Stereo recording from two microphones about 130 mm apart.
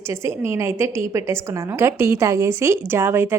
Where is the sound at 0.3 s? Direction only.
20° right (ahead or behind).